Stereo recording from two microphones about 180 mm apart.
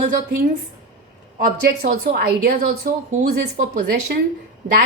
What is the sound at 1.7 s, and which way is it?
A woman's voice, 55° right (ahead or behind).